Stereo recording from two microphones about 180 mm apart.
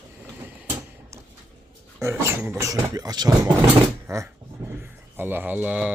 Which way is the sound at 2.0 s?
15° right (ahead or behind).